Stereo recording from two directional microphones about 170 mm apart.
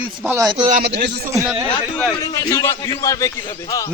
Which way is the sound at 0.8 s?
90° right.